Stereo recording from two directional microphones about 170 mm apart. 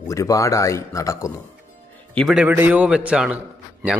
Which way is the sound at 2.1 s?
5° right (ahead or behind).